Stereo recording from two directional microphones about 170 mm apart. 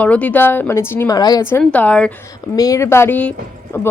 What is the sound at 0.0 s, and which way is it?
Speech, 10° left (ahead or behind).